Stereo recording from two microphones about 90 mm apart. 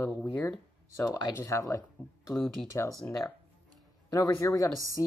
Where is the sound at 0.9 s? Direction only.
40° left (ahead or behind).